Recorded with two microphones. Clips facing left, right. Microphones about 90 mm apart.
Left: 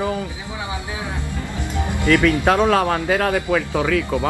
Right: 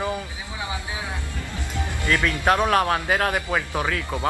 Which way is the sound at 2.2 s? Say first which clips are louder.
Left 2 dB; 20° left (ahead or behind).